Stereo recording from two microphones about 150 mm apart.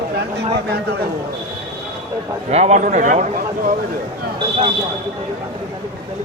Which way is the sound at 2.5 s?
50° right (ahead or behind).